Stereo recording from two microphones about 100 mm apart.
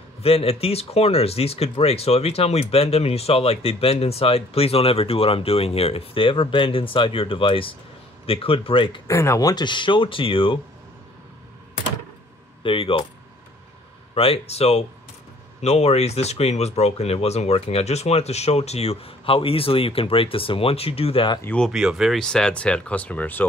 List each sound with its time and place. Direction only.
0.2 s speech: 75° left (ahead or behind); by 9.0 s 60° left (ahead or behind)
9.0 s speech: 30° left (ahead or behind); by 10.6 s 60° left (ahead or behind)
12.6 s speech: 60° left (ahead or behind)
14.1 s speech: 75° left (ahead or behind)
21.7 s speech: 5° right (ahead or behind)
22.2 s speech: 5° left (ahead or behind)